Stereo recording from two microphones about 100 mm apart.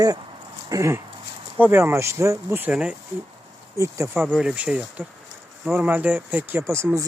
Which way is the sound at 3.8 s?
30° right (ahead or behind).